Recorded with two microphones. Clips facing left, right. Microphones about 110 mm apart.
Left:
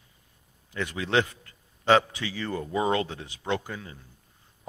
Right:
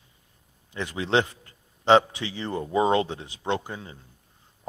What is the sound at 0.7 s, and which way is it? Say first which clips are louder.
A man's voice: right 2 dB; 25° right (ahead or behind).